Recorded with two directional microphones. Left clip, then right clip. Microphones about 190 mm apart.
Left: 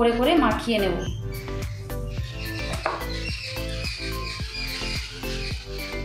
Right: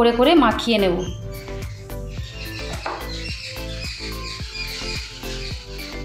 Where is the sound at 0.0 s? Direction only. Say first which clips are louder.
Right 5 dB; 55° right (ahead or behind).